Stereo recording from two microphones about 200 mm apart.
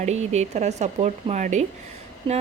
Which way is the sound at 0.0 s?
35° right (ahead or behind).